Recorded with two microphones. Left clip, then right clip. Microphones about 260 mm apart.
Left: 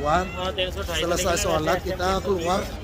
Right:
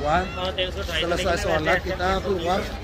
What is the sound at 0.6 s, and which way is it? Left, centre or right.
Speech, left.